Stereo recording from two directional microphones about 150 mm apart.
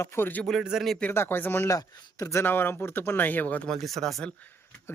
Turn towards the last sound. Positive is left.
turn(degrees=0)  # may be behind; listen again after turning